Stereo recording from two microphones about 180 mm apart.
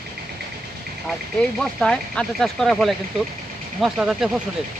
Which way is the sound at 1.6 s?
5° left (ahead or behind).